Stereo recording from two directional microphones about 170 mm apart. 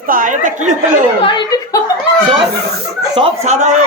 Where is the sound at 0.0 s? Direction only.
55° right (ahead or behind).